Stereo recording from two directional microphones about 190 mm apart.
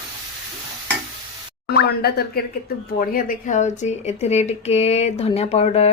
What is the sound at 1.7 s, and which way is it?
Speech, 55° left (ahead or behind).